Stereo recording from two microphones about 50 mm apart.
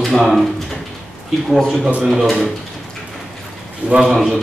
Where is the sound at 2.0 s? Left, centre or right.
Centre.